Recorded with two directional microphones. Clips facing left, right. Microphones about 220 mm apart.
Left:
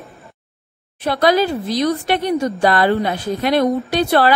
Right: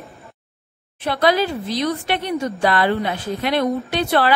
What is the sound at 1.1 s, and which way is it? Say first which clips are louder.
A woman's voice: left 3 dB; 40° left (ahead or behind).